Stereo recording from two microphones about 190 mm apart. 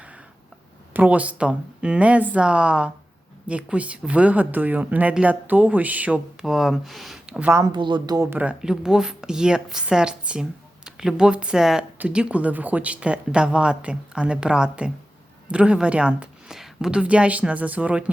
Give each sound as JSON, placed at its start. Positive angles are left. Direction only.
{"t": 0.9, "sound": "speech", "side_deg": -10}
{"t": 7.6, "sound": "speech", "side_deg": -25}